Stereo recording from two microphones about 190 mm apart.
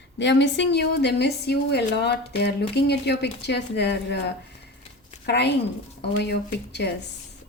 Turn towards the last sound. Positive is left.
turn(degrees=60)  # may be behind; listen again after turning